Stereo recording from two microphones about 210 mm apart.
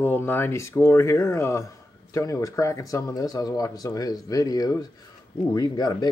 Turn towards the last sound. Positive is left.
turn(degrees=20)  # may be behind; listen again after turning